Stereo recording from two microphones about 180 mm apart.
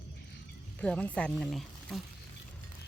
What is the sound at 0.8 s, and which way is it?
Speech, 5° left (ahead or behind).